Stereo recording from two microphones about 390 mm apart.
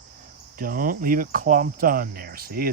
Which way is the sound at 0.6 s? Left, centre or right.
Right.